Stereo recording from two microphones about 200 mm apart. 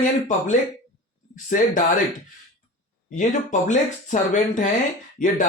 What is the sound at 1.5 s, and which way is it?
Speech, 40° left (ahead or behind).